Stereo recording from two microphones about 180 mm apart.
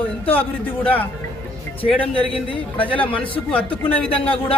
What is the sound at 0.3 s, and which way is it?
Speech, 30° left (ahead or behind).